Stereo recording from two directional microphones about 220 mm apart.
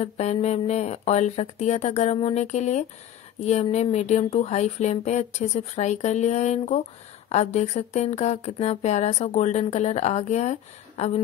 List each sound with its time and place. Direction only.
0.0 s speech: 30° left (ahead or behind)